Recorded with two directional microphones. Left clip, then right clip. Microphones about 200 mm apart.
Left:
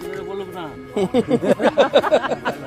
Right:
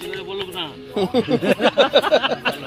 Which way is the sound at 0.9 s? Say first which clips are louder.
Left 1 dB; 5° left (ahead or behind).